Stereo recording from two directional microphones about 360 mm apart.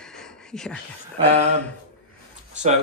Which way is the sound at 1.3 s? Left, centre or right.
Centre.